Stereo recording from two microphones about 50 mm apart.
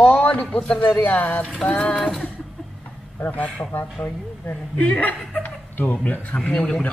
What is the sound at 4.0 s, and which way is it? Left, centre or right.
A man's voice, left.